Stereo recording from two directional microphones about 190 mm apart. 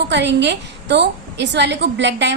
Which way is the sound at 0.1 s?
65° right (ahead or behind).